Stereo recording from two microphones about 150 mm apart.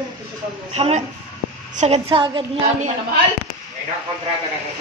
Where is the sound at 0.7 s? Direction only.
40° right (ahead or behind).